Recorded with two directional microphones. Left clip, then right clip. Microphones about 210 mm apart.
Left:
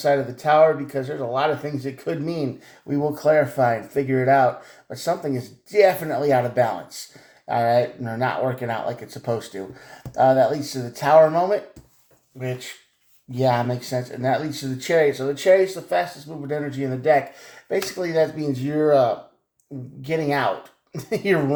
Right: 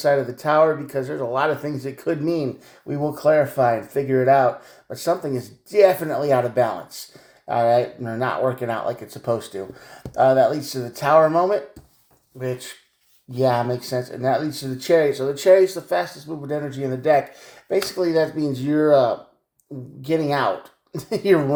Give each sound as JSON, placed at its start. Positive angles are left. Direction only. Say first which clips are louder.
{"t": 0.0, "sound": "speech", "louder": "right 1 dB", "side_deg": -35}